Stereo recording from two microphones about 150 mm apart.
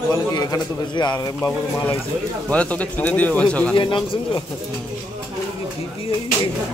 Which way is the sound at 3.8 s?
35° left (ahead or behind).